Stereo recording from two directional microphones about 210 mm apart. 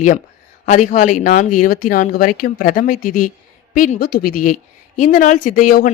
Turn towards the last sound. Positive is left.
turn(degrees=40)  # may be behind; listen again after turning